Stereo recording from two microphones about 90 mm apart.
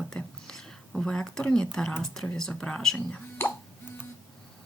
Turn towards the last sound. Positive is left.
turn(degrees=20)  # may be behind; listen again after turning